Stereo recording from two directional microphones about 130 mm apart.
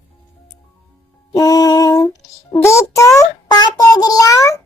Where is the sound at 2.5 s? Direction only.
20° left (ahead or behind).